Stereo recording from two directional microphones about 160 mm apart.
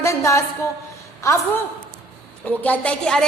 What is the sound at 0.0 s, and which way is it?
A woman's voice, 20° left (ahead or behind).